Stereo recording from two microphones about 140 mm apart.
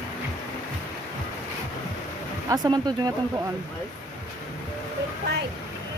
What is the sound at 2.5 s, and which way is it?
Speech, 30° right (ahead or behind).